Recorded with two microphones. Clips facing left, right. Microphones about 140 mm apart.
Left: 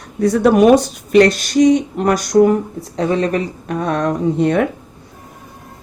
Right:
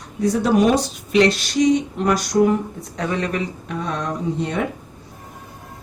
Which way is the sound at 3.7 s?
55° left (ahead or behind).